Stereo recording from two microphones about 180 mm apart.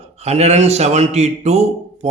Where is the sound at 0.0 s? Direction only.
35° right (ahead or behind).